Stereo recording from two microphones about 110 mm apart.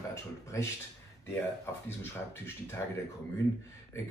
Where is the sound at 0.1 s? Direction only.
25° left (ahead or behind).